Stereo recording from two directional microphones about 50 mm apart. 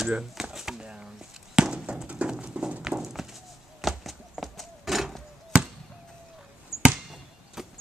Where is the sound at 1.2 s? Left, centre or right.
Centre.